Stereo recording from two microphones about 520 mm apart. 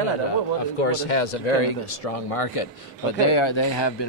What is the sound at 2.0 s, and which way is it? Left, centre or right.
Speech, left.